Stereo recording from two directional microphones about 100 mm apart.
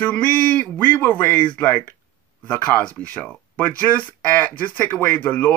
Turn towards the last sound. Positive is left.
turn(degrees=15)  # may be behind; listen again after turning